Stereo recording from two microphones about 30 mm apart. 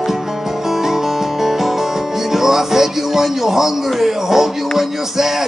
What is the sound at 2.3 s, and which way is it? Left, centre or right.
Speech, centre.